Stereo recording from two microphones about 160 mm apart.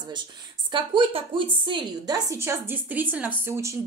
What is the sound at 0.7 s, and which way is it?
Speech, 30° right (ahead or behind).